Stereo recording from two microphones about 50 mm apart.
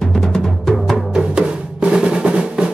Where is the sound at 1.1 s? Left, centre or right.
Centre.